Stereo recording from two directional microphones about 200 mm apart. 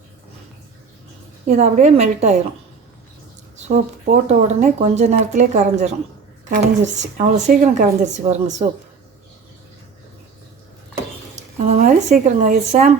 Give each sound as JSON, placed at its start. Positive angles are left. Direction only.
{"t": 1.5, "sound": "speech", "side_deg": -35}
{"t": 3.7, "sound": "speech", "side_deg": -40}
{"t": 11.3, "sound": "speech", "side_deg": -35}